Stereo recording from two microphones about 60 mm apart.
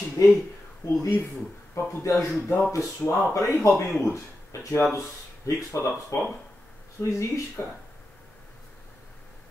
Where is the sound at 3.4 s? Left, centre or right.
Left.